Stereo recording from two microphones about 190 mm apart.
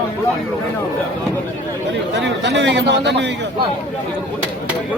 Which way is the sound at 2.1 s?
70° right (ahead or behind).